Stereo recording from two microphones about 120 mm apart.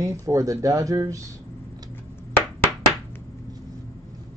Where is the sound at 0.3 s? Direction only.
25° right (ahead or behind).